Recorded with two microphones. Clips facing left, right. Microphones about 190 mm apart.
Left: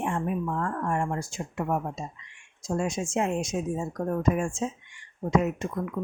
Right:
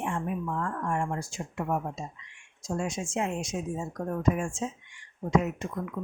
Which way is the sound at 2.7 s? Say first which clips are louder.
Left 3 dB; 45° left (ahead or behind).